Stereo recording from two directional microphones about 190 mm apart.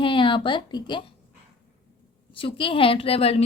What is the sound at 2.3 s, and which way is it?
A woman's voice, 25° left (ahead or behind).